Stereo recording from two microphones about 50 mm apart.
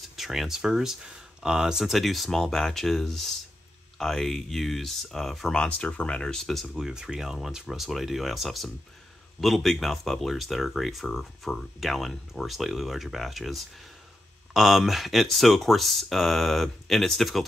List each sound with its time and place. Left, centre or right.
0.1 s speech: centre
1.9 s speech: centre
5.8 s speech: left; by 6.7 s centre
6.7 s speech: centre